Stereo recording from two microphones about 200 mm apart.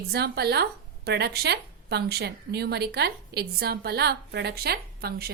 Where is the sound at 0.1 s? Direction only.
55° right (ahead or behind).